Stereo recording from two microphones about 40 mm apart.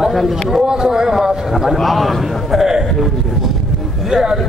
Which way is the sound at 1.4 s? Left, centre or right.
Centre.